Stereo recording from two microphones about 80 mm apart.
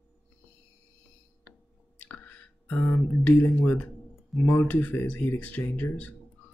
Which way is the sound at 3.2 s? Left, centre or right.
Centre.